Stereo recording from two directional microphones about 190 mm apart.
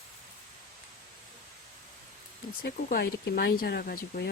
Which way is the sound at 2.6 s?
55° left (ahead or behind).